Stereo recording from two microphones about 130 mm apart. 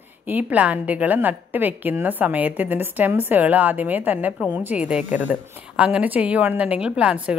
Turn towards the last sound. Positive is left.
turn(degrees=-10)  # may be behind; listen again after turning